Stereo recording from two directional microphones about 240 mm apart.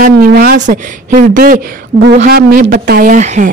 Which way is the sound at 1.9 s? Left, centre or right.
Right.